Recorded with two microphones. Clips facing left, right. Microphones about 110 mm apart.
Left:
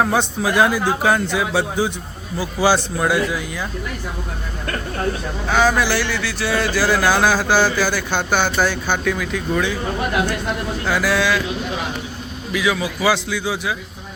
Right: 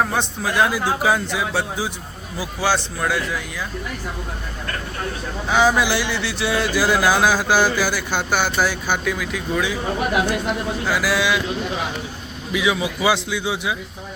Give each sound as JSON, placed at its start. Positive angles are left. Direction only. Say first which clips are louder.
{"t": 0.0, "sound": "speech", "louder": "left 3 dB", "side_deg": 5}
{"t": 5.5, "sound": "speech", "louder": "even", "side_deg": -15}
{"t": 10.8, "sound": "speech", "louder": "left 2 dB", "side_deg": -5}
{"t": 12.5, "sound": "a man's voice", "louder": "even", "side_deg": -15}